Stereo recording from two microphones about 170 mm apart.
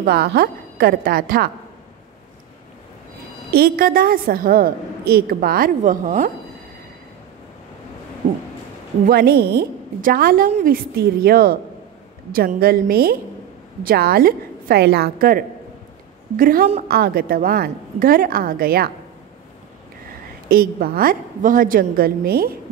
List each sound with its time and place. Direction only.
0.0 s a woman's voice: 65° right (ahead or behind)
3.5 s a woman's voice: 60° right (ahead or behind)
9.0 s a woman's voice: 70° right (ahead or behind)
20.4 s a woman's voice: 60° right (ahead or behind)